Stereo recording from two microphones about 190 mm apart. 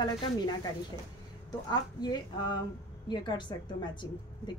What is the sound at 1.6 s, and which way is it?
A woman's voice, 20° left (ahead or behind).